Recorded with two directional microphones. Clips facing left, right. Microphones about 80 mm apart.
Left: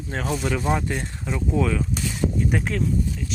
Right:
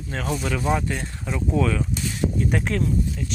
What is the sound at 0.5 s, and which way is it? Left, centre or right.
Speech, centre.